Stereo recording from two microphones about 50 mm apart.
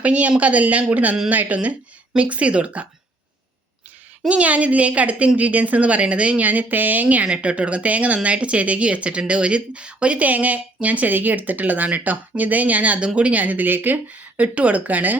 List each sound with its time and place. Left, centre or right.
0.0 s speech: right
4.3 s speech: right